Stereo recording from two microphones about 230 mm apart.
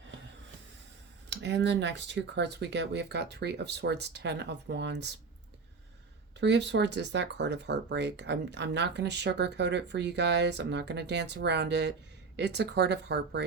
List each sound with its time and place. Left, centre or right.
1.3 s speech: right
6.4 s speech: right